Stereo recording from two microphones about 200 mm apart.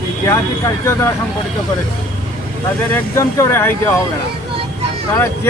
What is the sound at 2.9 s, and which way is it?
Speech, 15° left (ahead or behind).